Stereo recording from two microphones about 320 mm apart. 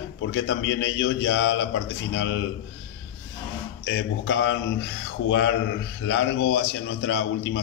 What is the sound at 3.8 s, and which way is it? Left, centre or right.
A man's voice, left.